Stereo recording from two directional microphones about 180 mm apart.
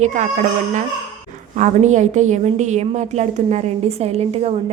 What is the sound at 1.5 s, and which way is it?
A woman's voice, 40° right (ahead or behind).